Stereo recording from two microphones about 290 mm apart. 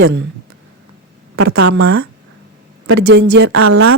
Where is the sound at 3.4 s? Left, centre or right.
Right.